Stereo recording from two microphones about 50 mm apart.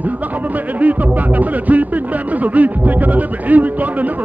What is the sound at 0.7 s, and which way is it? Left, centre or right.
Speech, right.